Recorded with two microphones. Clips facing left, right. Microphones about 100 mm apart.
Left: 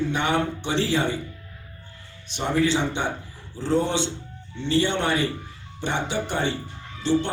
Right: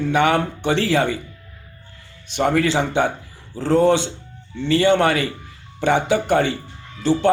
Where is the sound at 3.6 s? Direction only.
70° right (ahead or behind).